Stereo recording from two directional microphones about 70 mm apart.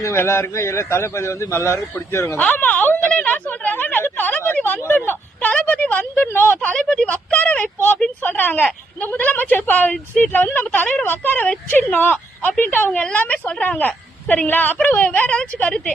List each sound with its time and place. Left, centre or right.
0.0 s a man's voice: left
2.5 s speech: left
3.1 s a sound: centre
6.7 s a woman's voice: centre